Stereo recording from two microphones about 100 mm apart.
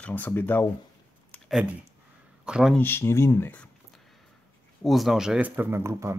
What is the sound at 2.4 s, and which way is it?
Speech, 10° right (ahead or behind).